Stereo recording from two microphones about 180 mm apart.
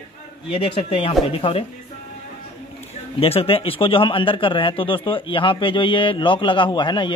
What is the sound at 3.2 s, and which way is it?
A man's voice, 30° left (ahead or behind).